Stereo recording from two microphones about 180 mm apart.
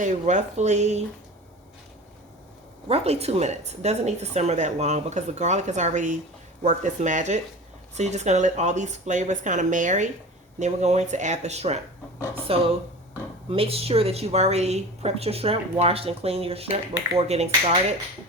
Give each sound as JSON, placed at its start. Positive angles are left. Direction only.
{"t": 0.0, "sound": "speech", "side_deg": -40}
{"t": 2.8, "sound": "speech", "side_deg": -35}